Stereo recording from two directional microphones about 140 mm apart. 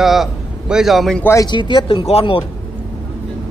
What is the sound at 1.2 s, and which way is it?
Speech, 20° left (ahead or behind).